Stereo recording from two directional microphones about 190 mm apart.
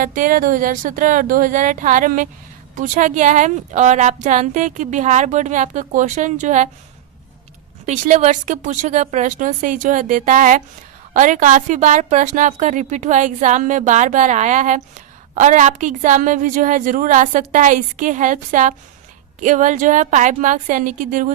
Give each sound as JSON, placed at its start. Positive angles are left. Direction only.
{"t": 0.0, "sound": "a woman's voice", "side_deg": -45}
{"t": 7.9, "sound": "a woman's voice", "side_deg": -35}